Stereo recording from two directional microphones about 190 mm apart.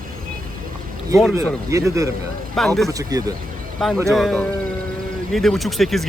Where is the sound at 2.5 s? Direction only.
Centre (ahead or behind).